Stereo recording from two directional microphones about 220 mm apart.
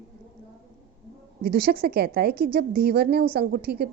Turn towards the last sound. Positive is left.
turn(degrees=-45)  # may be behind; listen again after turning